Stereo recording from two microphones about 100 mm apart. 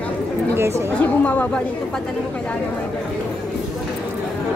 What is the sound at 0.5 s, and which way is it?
Speech, 25° right (ahead or behind).